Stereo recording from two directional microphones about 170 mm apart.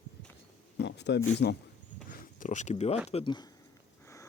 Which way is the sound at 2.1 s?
50° left (ahead or behind).